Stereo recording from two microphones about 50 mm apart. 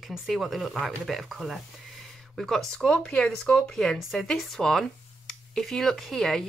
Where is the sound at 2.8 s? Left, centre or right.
Centre.